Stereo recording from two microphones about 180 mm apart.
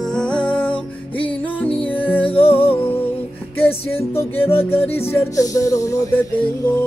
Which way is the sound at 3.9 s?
10° left (ahead or behind).